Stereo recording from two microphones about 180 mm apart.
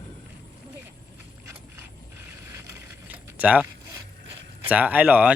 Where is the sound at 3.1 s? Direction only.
10° right (ahead or behind).